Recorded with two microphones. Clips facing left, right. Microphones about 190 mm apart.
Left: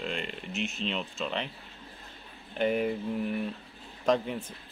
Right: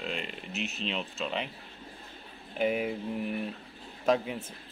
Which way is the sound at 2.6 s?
5° right (ahead or behind).